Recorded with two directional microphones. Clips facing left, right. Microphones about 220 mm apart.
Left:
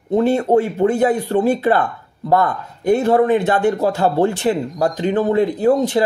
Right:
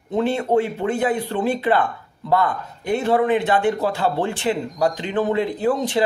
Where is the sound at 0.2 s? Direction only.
40° left (ahead or behind).